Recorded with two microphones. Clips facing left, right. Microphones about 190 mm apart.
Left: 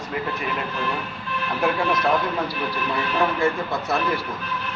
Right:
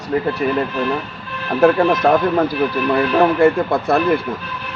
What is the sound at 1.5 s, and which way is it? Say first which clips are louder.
Speech: right 10 dB; 50° right (ahead or behind).